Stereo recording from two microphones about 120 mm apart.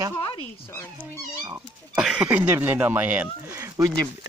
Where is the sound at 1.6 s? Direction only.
5° right (ahead or behind).